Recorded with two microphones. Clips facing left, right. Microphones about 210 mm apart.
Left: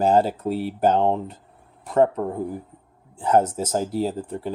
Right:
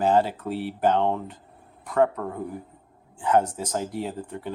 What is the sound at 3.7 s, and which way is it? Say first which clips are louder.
Speech: left 6 dB; 35° left (ahead or behind).